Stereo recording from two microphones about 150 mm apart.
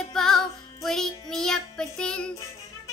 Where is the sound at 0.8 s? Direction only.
5° left (ahead or behind).